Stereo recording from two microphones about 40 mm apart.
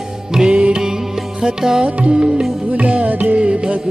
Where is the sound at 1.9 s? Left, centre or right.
Right.